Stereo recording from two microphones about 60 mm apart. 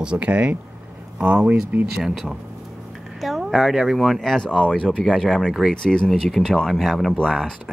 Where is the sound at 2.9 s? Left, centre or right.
Centre.